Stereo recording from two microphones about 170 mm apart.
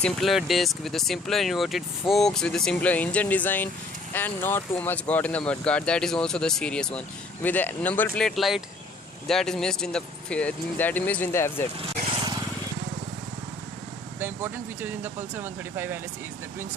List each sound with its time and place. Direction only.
0.0 s speech: centre (ahead or behind)
11.8 s vehicle: 30° right (ahead or behind)
14.2 s speech: 10° right (ahead or behind)